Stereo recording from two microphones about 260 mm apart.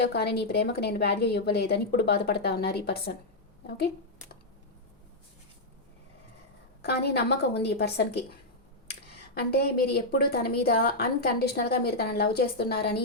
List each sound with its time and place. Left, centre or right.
0.0 s a woman's voice: left
6.8 s a woman's voice: left